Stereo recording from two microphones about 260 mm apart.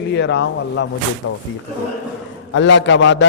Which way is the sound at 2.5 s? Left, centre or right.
Left.